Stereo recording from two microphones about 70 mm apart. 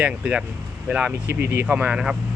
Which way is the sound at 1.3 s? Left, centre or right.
Right.